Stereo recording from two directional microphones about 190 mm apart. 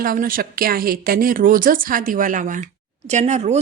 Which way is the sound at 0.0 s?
45° right (ahead or behind).